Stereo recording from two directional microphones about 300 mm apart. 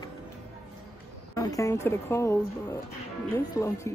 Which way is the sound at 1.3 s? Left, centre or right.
Centre.